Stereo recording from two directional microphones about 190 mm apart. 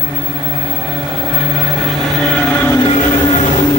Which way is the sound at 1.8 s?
Centre (ahead or behind).